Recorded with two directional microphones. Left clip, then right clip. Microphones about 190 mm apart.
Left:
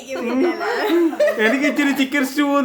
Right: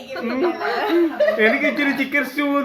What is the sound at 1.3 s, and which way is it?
Speech, 40° left (ahead or behind).